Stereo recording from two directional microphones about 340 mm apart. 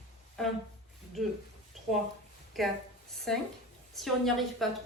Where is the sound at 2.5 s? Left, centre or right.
Centre.